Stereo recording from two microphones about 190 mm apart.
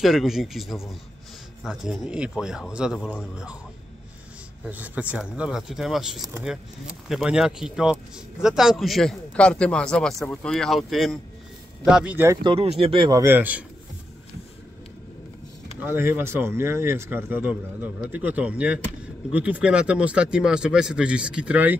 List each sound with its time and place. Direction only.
0.0 s speech: centre (ahead or behind)
4.6 s speech: 10° right (ahead or behind)
12.4 s speech: 30° right (ahead or behind)
13.2 s speech: 10° right (ahead or behind)
15.8 s speech: 10° right (ahead or behind)